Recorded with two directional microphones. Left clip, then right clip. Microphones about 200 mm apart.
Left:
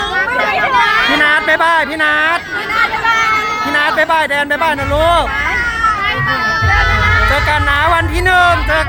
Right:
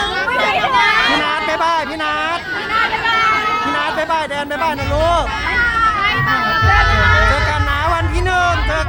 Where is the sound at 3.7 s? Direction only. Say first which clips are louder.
Left 5 dB; 25° left (ahead or behind).